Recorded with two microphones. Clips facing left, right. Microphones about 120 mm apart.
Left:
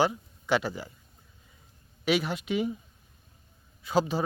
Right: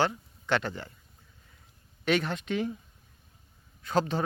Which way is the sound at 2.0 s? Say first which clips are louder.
Left 1 dB; 5° left (ahead or behind).